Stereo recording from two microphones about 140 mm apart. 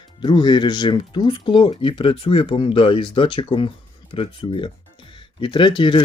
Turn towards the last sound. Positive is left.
turn(degrees=35)  # may be behind; listen again after turning